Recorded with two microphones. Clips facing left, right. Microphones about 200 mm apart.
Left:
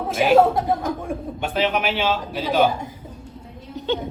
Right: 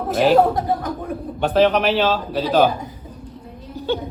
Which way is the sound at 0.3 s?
25° left (ahead or behind).